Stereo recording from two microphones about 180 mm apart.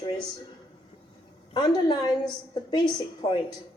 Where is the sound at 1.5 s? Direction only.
25° left (ahead or behind).